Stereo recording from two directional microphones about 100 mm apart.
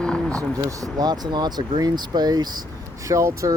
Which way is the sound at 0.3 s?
35° right (ahead or behind).